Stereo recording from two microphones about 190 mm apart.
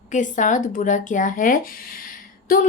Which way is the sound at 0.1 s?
40° left (ahead or behind).